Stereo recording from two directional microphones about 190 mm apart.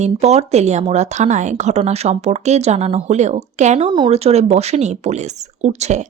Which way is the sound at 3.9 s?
25° right (ahead or behind).